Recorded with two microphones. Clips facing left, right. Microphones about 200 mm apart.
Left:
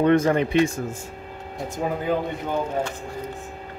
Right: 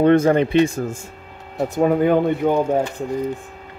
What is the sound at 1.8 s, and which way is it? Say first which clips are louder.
Speech: right 9 dB; 60° right (ahead or behind).